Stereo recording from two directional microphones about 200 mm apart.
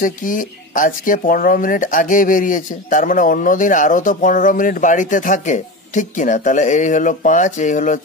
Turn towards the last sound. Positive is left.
turn(degrees=40)  # may be behind; listen again after turning